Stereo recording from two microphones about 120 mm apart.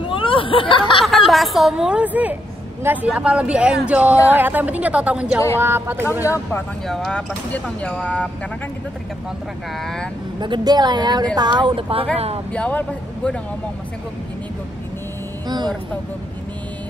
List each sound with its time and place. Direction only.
0.1 s speech: 45° left (ahead or behind)
1.0 s a woman's voice: centre (ahead or behind); by 6.0 s 20° right (ahead or behind)
6.2 s speech: 25° left (ahead or behind)
6.9 s speech: 5° left (ahead or behind)
10.4 s speech: 35° right (ahead or behind)
12.5 s speech: 10° left (ahead or behind)
15.4 s speech: 35° right (ahead or behind)